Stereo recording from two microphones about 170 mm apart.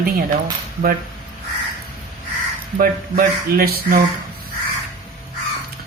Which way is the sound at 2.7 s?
60° right (ahead or behind).